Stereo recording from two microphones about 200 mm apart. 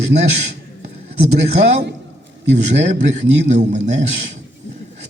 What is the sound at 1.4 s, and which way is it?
A man's voice, 35° right (ahead or behind).